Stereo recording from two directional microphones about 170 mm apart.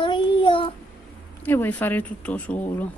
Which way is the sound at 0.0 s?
30° left (ahead or behind).